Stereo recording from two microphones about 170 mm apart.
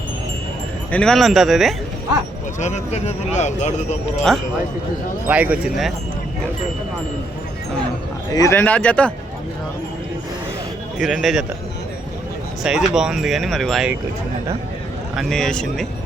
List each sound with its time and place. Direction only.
0.9 s speech: 5° left (ahead or behind)
2.6 s speech: 40° left (ahead or behind)
5.3 s speech: 10° right (ahead or behind)
8.3 s a man's voice: 20° left (ahead or behind)
10.9 s speech: centre (ahead or behind)
12.6 s speech: 5° right (ahead or behind)
15.1 s speech: centre (ahead or behind)